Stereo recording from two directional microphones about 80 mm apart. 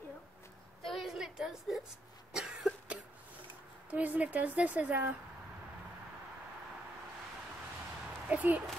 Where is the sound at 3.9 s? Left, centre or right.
Centre.